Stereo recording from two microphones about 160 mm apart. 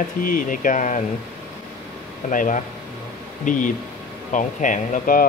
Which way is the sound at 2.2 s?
55° left (ahead or behind).